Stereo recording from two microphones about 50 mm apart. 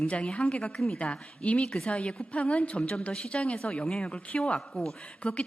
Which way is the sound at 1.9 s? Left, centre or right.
Left.